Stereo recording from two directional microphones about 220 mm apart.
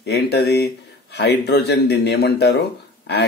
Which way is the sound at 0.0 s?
50° left (ahead or behind).